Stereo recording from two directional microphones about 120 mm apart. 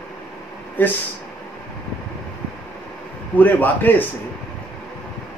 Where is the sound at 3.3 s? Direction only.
15° left (ahead or behind).